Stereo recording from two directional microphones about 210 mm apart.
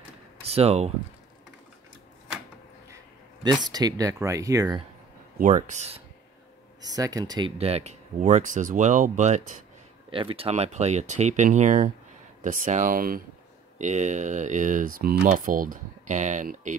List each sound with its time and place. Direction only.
0.5 s speech: 30° right (ahead or behind)
3.6 s speech: 20° right (ahead or behind)
5.4 s speech: 35° right (ahead or behind)
6.8 s speech: 15° right (ahead or behind); by 16.7 s 35° right (ahead or behind)